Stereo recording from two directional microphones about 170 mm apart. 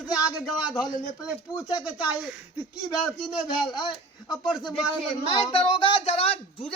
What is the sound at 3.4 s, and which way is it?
Speech, 25° left (ahead or behind).